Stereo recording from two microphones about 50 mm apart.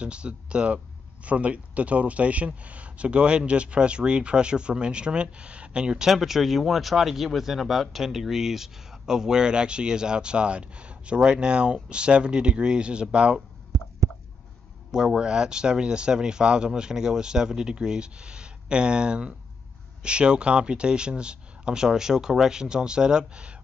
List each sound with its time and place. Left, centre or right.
0.0 s speech: right
6.1 s speech: centre
14.9 s speech: centre